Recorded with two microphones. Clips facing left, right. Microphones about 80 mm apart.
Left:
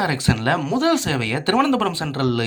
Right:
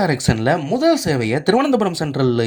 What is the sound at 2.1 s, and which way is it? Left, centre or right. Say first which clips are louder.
Speech: right 6 dB; right.